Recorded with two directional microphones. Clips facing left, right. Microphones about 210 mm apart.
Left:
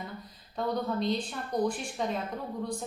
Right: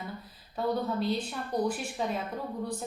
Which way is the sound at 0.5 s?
5° right (ahead or behind).